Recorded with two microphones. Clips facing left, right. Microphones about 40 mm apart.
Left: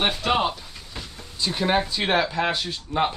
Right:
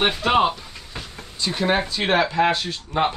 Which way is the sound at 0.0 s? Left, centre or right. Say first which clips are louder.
Right 4 dB; centre.